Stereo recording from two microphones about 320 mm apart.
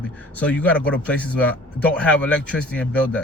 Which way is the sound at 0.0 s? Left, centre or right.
Centre.